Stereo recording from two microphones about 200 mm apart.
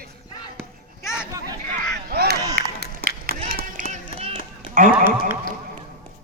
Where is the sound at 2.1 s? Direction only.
55° right (ahead or behind).